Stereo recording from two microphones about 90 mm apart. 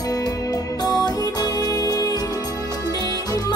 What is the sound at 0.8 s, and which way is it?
Music, 45° left (ahead or behind).